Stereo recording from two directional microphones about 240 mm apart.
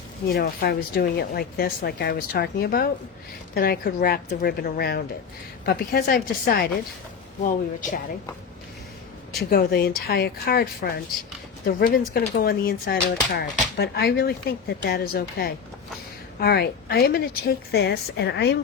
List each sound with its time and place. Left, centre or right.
0.3 s speech: left
9.4 s a woman's voice: left